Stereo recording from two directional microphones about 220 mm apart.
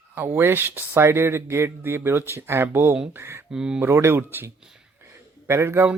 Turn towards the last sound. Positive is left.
turn(degrees=-10)  # may be behind; listen again after turning